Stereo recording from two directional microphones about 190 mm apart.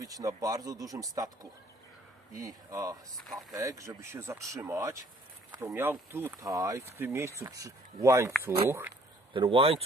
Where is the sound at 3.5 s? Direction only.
15° right (ahead or behind).